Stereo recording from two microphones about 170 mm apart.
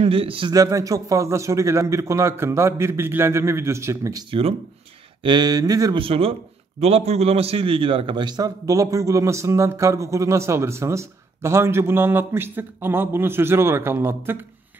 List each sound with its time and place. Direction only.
0.0 s a man's voice: 30° right (ahead or behind)
5.2 s a sound: 25° right (ahead or behind)
5.9 s a man's voice: 35° right (ahead or behind); by 14.4 s 15° right (ahead or behind)